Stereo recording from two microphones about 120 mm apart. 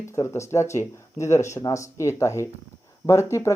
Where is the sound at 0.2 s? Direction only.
25° left (ahead or behind).